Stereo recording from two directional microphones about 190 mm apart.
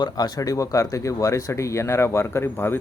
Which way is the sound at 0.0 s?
20° left (ahead or behind).